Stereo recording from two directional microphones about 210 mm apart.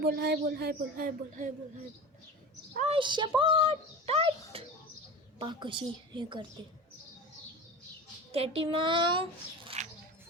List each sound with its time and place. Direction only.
0.0 s speech: 50° right (ahead or behind)
2.7 s a child's voice: 30° right (ahead or behind)
8.3 s a child's voice: 25° right (ahead or behind)
9.6 s bird: 35° right (ahead or behind)